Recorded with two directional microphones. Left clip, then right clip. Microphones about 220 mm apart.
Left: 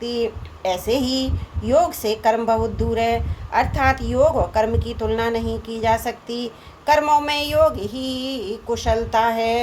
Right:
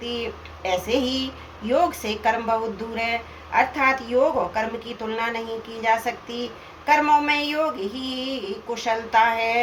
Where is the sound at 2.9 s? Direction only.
45° left (ahead or behind).